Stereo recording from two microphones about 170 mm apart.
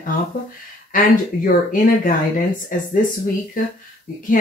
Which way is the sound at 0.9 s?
55° left (ahead or behind).